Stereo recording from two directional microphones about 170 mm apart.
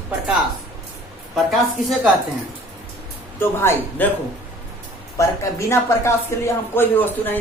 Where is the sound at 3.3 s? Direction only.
10° left (ahead or behind).